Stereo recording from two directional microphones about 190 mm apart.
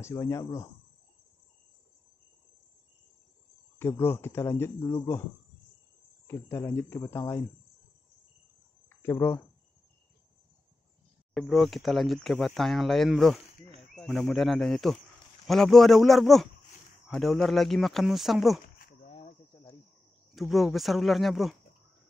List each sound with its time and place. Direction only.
0.0 s speech: 15° left (ahead or behind)
3.7 s speech: 10° left (ahead or behind)
6.2 s speech: 15° left (ahead or behind)
8.8 s cricket: 15° left (ahead or behind)
11.3 s speech: centre (ahead or behind)
19.0 s cricket: 30° left (ahead or behind)
19.5 s cricket: 15° left (ahead or behind)
20.3 s speech: centre (ahead or behind)